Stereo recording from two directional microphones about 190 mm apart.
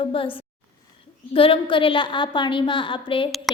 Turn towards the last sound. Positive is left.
turn(degrees=25)  # may be behind; listen again after turning